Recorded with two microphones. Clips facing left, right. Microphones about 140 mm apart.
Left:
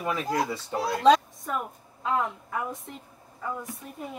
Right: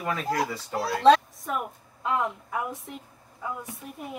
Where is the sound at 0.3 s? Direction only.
25° left (ahead or behind).